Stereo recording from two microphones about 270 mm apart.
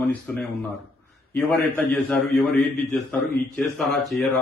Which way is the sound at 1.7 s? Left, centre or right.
Centre.